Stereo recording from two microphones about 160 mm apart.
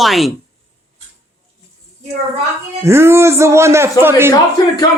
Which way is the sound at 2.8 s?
15° right (ahead or behind).